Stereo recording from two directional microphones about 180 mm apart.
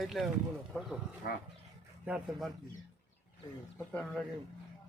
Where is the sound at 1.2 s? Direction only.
65° left (ahead or behind).